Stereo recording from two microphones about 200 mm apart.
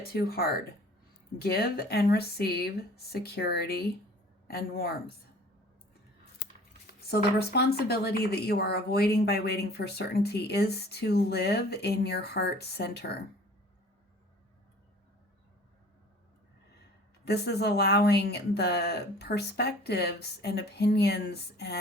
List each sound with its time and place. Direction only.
0.1 s speech: 50° left (ahead or behind)
6.8 s speech: 50° left (ahead or behind)
17.2 s speech: 55° left (ahead or behind)